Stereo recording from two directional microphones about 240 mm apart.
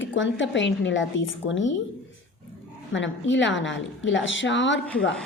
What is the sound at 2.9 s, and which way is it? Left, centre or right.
Speech, left.